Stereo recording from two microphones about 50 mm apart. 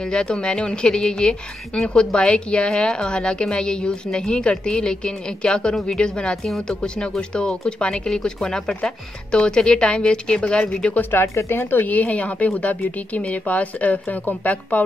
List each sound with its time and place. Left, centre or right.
0.0 s a woman's voice: centre
11.0 s speech: left
11.9 s speech: left